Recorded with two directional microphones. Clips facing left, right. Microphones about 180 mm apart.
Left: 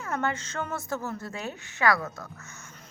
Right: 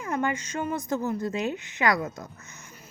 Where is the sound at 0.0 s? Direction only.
15° right (ahead or behind).